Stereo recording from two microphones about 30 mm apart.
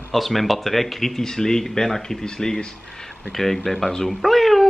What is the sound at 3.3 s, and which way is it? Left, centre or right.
Speech, centre.